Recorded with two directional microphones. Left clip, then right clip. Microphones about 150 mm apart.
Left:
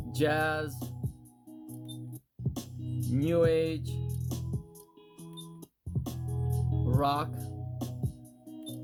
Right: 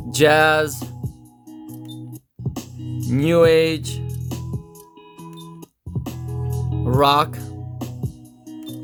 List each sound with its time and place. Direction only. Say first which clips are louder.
0.1 s speech: right 15 dB; 50° right (ahead or behind)
3.1 s speech: right 12 dB; 50° right (ahead or behind)
6.2 s organ: right 8 dB; 15° right (ahead or behind)
6.8 s speech: right 14 dB; 50° right (ahead or behind)
7.9 s music: right 8 dB; 15° right (ahead or behind)